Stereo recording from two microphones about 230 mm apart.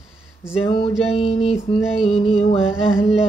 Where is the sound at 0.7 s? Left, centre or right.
Left.